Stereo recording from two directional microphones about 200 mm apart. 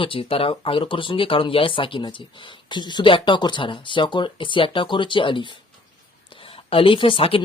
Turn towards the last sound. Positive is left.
turn(degrees=25)  # may be behind; listen again after turning